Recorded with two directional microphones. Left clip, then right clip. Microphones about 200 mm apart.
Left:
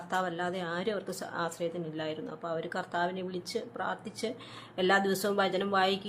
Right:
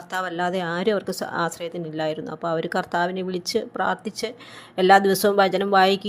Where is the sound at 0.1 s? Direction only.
30° right (ahead or behind).